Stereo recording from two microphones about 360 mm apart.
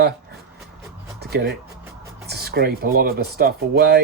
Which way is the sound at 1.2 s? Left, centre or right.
Right.